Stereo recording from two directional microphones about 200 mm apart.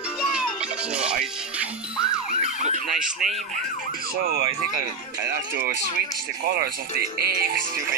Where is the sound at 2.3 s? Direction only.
35° right (ahead or behind).